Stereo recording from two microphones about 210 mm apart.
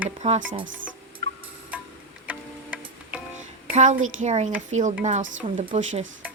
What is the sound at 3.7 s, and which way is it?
Speech, 35° right (ahead or behind).